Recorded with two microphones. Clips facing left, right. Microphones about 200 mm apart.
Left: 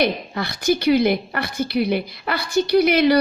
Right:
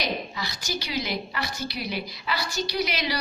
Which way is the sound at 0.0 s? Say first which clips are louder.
Left 9 dB; 55° left (ahead or behind).